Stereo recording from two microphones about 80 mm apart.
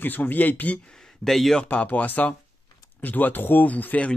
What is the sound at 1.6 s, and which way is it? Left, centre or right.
Speech, centre.